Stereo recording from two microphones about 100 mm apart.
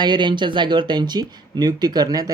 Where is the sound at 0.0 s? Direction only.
50° right (ahead or behind).